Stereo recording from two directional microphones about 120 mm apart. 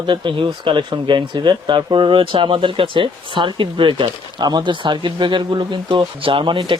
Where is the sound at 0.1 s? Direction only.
45° right (ahead or behind).